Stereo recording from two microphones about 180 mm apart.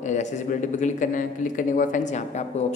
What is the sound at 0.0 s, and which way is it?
A man's voice, 40° left (ahead or behind).